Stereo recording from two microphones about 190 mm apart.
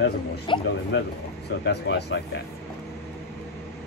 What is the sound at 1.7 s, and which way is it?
Speech, 65° left (ahead or behind).